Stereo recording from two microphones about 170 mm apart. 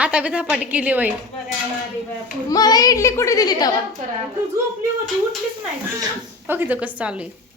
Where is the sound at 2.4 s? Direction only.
25° left (ahead or behind).